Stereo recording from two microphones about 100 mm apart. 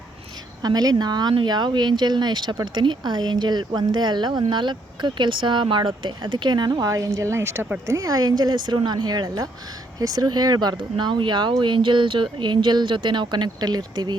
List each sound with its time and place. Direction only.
0.6 s speech: 40° right (ahead or behind)